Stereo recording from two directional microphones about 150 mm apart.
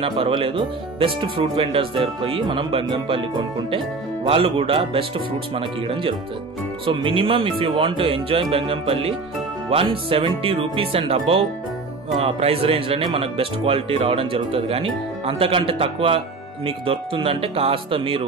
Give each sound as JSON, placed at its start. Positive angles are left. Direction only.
{"t": 0.0, "sound": "speech", "side_deg": -35}